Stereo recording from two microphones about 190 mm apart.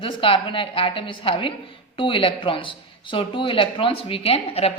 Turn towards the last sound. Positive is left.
turn(degrees=30)  # may be behind; listen again after turning